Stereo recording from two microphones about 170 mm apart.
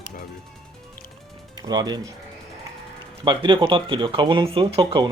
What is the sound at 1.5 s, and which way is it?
Speech, 25° right (ahead or behind).